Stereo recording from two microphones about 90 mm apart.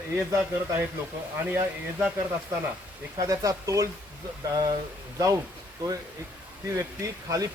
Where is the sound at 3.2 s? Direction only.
40° right (ahead or behind).